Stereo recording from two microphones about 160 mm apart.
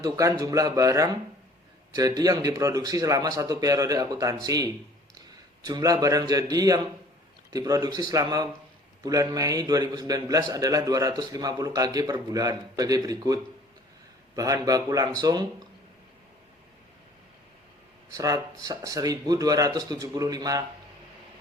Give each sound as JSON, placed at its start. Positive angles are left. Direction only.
{"t": 0.0, "sound": "a man's voice", "side_deg": -20}
{"t": 18.1, "sound": "a man's voice", "side_deg": -20}